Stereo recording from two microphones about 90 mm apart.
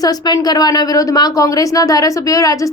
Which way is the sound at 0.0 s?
45° left (ahead or behind).